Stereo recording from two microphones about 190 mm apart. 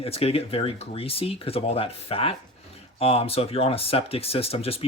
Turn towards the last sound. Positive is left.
turn(degrees=30)  # may be behind; listen again after turning